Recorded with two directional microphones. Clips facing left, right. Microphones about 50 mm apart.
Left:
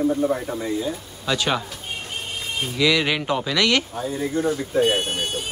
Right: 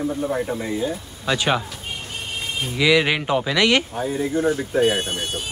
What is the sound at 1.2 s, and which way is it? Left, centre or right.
Speech, centre.